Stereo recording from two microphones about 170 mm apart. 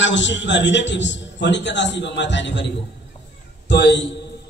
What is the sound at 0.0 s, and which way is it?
A man's voice, 90° left.